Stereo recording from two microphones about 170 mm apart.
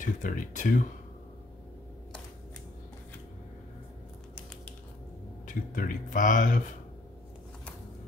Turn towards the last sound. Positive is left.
turn(degrees=50)  # may be behind; listen again after turning